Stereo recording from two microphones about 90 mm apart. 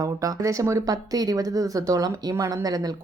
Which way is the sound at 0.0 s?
40° right (ahead or behind).